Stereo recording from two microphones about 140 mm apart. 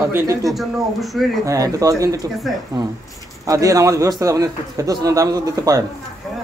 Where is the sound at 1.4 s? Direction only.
25° right (ahead or behind).